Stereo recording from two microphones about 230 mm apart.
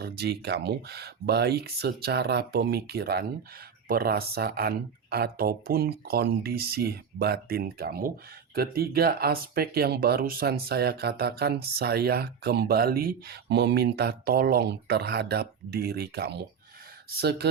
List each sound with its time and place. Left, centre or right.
0.0 s speech: right